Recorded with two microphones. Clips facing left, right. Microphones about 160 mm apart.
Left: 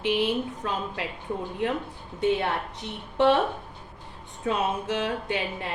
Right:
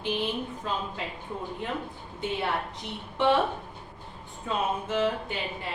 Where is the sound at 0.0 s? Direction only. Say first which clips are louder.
Left 5 dB; 75° left (ahead or behind).